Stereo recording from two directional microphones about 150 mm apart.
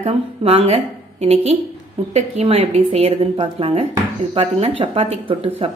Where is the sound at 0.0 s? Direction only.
40° right (ahead or behind).